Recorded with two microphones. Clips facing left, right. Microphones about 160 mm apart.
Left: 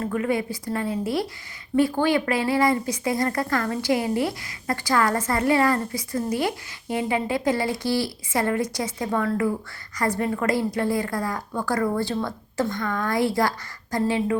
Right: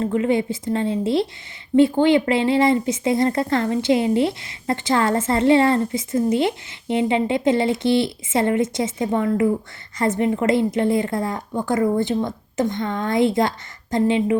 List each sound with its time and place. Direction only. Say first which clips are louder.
0.0 s speech: right 5 dB; 25° right (ahead or behind)